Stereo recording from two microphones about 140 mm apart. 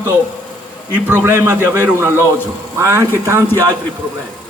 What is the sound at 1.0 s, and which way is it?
A man's voice, 15° right (ahead or behind).